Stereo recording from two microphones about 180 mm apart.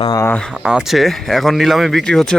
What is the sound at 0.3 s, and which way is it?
Speech, centre (ahead or behind).